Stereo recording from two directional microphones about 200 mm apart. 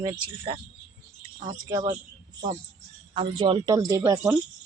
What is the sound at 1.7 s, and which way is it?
Speech, 20° right (ahead or behind).